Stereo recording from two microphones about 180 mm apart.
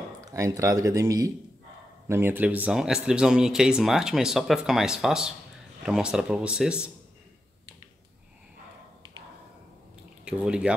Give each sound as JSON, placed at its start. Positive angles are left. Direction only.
{"t": 0.2, "sound": "a man's voice", "side_deg": -20}
{"t": 10.2, "sound": "speech", "side_deg": -5}